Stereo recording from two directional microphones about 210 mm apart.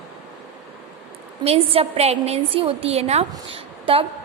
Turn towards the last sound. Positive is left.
turn(degrees=-25)  # may be behind; listen again after turning